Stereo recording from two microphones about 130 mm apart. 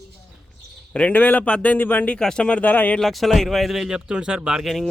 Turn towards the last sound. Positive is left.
turn(degrees=0)  # may be behind; listen again after turning